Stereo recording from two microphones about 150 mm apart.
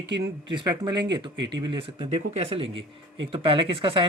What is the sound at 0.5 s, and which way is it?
Speech, 30° right (ahead or behind).